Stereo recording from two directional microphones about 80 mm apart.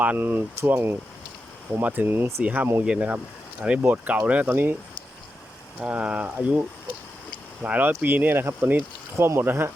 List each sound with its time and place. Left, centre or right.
0.0 s speech: right
5.8 s speech: centre
7.6 s speech: right